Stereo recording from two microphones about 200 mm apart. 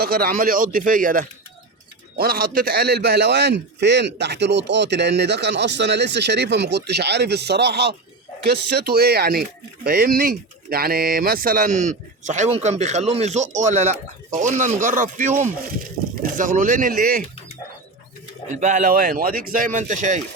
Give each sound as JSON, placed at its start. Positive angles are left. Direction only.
{"t": 0.0, "sound": "a man's voice", "side_deg": -45}
{"t": 18.5, "sound": "speech", "side_deg": -35}